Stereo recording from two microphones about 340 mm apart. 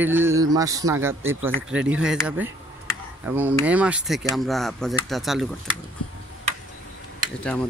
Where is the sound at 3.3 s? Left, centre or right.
Centre.